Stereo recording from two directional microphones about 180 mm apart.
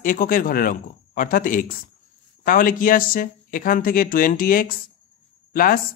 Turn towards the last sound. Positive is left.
turn(degrees=50)  # may be behind; listen again after turning